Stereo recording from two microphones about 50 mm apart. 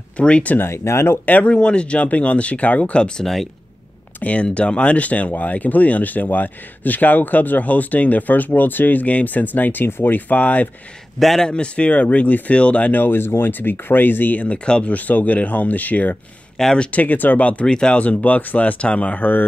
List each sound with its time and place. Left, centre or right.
0.2 s speech: left
0.6 s speech: left
1.2 s speech: left
11.1 s a man's voice: centre
11.4 s speech: centre
12.9 s speech: left
16.5 s speech: centre
16.8 s speech: left
17.6 s speech: centre
18.0 s speech: left